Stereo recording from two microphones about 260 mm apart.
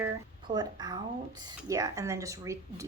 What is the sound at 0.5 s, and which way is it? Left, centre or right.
Speech, centre.